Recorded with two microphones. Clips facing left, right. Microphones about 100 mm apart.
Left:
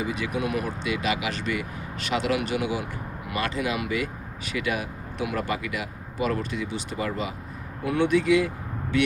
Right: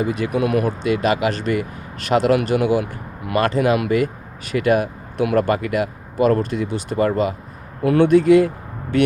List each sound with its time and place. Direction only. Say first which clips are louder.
0.0 s speech: right 8 dB; 50° right (ahead or behind)
0.8 s speech: right 9 dB; 45° right (ahead or behind)